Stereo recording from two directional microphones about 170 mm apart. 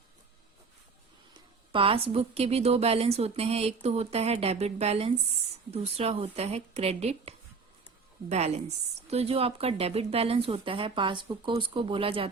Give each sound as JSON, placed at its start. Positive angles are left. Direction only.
{"t": 1.3, "sound": "a woman's voice", "side_deg": -30}